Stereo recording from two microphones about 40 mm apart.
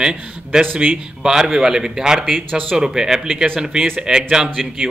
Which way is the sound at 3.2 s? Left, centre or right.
Centre.